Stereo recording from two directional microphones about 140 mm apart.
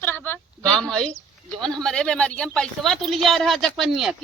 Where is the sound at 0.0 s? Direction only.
15° left (ahead or behind).